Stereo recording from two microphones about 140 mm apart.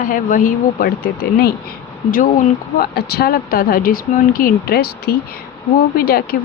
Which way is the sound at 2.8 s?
90° left.